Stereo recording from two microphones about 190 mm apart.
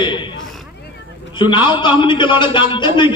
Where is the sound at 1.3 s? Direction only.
25° left (ahead or behind).